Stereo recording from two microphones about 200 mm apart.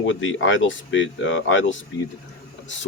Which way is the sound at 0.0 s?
70° left (ahead or behind).